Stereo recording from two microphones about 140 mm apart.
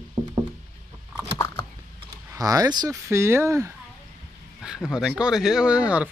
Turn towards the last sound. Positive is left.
turn(degrees=-10)  # may be behind; listen again after turning